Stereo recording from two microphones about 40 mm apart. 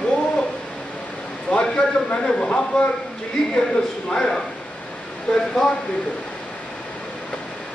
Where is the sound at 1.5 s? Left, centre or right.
Left.